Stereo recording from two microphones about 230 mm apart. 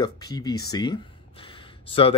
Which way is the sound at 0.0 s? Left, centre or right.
Centre.